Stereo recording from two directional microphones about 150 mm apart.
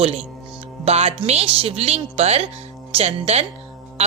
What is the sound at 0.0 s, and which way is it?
Speech, 40° right (ahead or behind).